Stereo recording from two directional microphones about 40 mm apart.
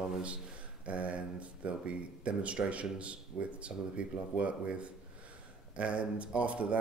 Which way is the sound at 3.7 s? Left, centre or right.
Right.